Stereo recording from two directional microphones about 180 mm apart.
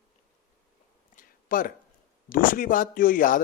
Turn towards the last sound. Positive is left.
turn(degrees=50)  # may be behind; listen again after turning